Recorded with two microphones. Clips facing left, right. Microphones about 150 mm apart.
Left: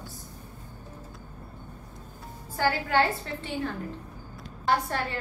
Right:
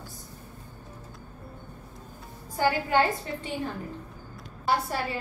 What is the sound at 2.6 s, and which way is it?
Speech, 15° right (ahead or behind).